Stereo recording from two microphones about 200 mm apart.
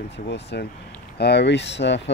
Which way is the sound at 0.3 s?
55° left (ahead or behind).